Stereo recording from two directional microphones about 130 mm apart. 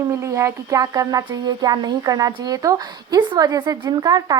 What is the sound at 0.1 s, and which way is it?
Speech, 25° right (ahead or behind).